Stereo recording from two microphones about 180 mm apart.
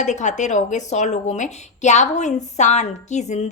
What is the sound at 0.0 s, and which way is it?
A woman's voice, 40° left (ahead or behind).